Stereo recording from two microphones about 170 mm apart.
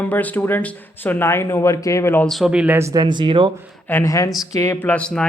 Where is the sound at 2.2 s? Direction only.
Centre (ahead or behind); by 3.5 s 30° right (ahead or behind).